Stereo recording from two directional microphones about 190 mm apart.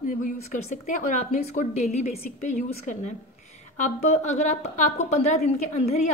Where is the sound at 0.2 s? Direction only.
40° left (ahead or behind).